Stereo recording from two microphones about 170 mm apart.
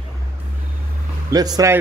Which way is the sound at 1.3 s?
20° right (ahead or behind).